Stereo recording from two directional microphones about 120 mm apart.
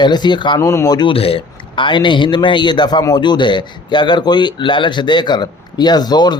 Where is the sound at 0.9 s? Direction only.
45° left (ahead or behind).